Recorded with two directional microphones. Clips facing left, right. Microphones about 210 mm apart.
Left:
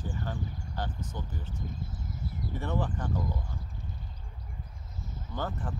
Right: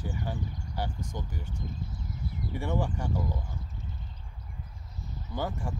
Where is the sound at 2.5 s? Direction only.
10° right (ahead or behind).